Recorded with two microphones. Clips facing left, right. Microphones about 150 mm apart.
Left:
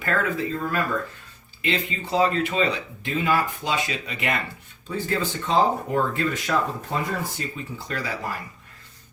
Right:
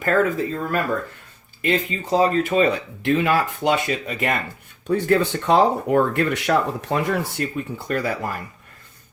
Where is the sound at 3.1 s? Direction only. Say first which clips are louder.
Right 4 dB; 80° right; by 4.4 s 45° right (ahead or behind).